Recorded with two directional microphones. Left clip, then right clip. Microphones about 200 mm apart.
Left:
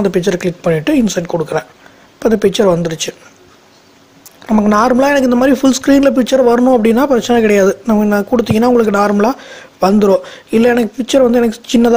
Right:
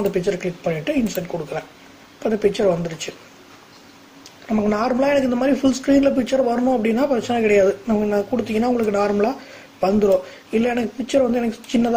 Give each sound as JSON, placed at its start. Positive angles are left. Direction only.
{"t": 0.1, "sound": "speech", "side_deg": 45}
{"t": 4.5, "sound": "speech", "side_deg": 45}